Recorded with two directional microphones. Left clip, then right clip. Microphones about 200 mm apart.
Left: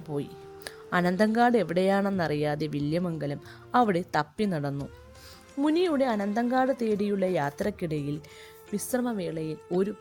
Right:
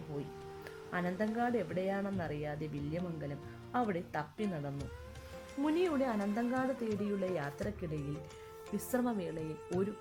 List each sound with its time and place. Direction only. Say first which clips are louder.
0.6 s speech: left 12 dB; 45° left (ahead or behind)
5.6 s a woman's voice: left 8 dB; 35° left (ahead or behind)
8.7 s a woman's voice: left 6 dB; 25° left (ahead or behind)